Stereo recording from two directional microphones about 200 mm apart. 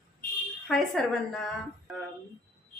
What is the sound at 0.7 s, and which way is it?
Speech, centre (ahead or behind).